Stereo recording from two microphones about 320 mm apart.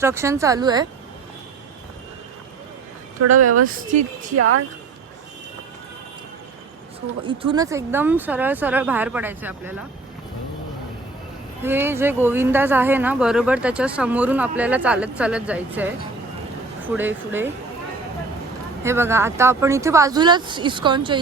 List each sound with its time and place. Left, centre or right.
0.0 s speech: centre
3.2 s speech: right
3.7 s speech: right
4.4 s speech: right
7.3 s speech: centre
11.6 s speech: centre
18.8 s speech: centre